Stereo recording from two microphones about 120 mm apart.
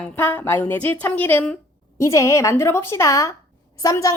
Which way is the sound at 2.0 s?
25° left (ahead or behind).